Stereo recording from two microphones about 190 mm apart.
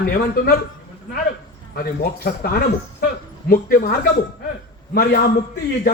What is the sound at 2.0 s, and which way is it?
A man's voice, 55° left (ahead or behind).